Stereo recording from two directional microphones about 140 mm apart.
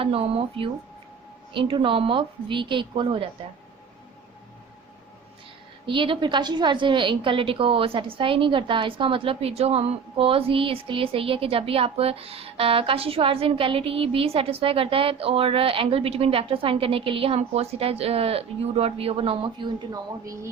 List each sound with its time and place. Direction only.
0.0 s a woman's voice: 45° right (ahead or behind)
5.8 s a woman's voice: 35° right (ahead or behind)